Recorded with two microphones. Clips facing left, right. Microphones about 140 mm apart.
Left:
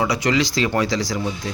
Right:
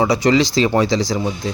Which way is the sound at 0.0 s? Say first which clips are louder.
Right 5 dB; 30° right (ahead or behind).